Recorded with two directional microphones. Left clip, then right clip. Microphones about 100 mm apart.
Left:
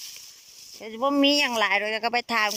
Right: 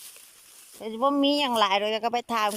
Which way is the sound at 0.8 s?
10° right (ahead or behind).